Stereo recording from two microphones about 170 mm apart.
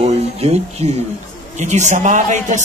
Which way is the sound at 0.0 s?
40° right (ahead or behind).